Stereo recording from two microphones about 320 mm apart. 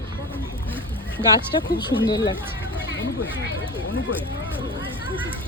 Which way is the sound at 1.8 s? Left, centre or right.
Centre.